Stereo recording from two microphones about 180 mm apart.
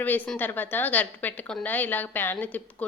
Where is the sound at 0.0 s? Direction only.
10° left (ahead or behind).